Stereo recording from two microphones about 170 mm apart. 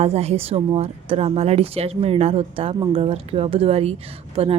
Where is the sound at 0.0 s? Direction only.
35° right (ahead or behind).